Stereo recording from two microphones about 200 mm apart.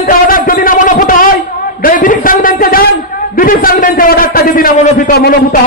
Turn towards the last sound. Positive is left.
turn(degrees=45)  # may be behind; listen again after turning